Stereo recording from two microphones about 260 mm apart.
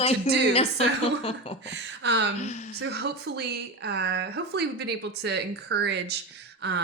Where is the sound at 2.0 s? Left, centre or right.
Right.